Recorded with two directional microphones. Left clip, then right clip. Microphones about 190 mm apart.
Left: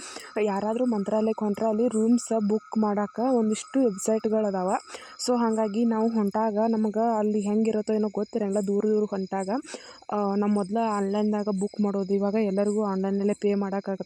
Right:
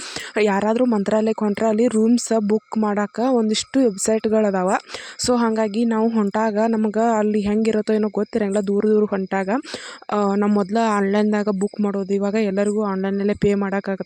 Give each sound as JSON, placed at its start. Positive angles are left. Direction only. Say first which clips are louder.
{"t": 0.3, "sound": "speech", "louder": "right 8 dB", "side_deg": -25}
{"t": 11.9, "sound": "speech", "louder": "right 4 dB", "side_deg": -10}